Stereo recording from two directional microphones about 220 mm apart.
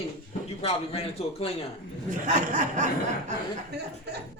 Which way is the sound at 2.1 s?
35° right (ahead or behind).